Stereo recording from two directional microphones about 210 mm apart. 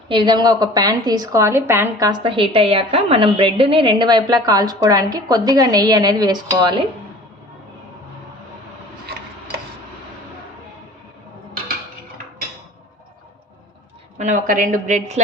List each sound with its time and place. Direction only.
0.1 s a woman's voice: 20° right (ahead or behind)
14.2 s a woman's voice: 35° right (ahead or behind)